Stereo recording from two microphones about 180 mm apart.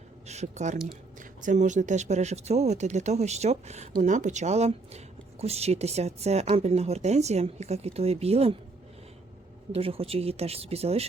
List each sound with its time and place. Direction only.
0.3 s speech: 40° right (ahead or behind)
9.7 s speech: 30° right (ahead or behind)